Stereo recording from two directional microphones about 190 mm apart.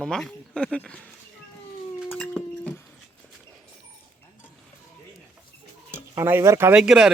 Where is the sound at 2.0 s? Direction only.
5° left (ahead or behind).